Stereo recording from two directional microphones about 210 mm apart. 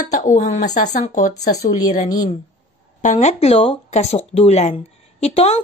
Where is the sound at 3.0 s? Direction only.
35° left (ahead or behind).